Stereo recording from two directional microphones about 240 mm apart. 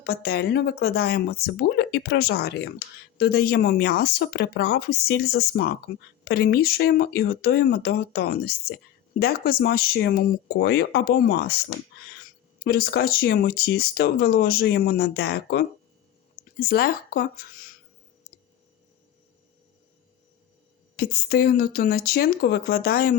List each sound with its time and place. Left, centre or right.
0.0 s speech: left
20.9 s speech: left